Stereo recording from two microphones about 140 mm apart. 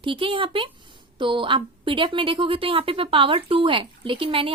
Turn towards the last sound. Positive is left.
turn(degrees=-40)  # may be behind; listen again after turning